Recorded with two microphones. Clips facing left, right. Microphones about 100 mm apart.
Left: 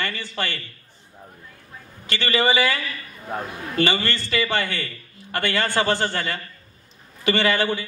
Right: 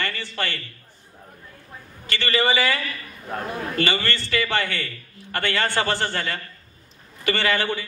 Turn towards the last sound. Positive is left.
turn(degrees=20)  # may be behind; listen again after turning